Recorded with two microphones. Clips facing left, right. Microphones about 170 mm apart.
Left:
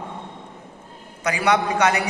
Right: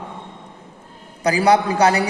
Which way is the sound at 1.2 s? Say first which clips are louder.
Right 5 dB; 35° right (ahead or behind).